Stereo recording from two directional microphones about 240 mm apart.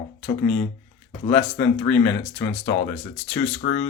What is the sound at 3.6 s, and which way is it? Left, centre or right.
Speech, left.